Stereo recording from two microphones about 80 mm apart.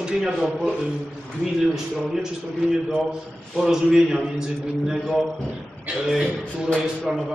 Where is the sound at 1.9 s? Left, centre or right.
Centre.